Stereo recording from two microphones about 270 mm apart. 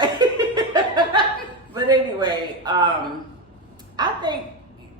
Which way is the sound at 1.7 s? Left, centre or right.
Centre.